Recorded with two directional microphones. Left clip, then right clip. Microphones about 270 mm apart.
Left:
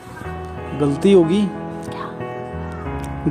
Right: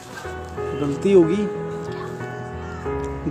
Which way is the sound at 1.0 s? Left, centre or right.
Left.